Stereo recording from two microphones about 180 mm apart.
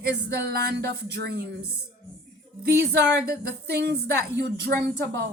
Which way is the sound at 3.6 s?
65° right (ahead or behind).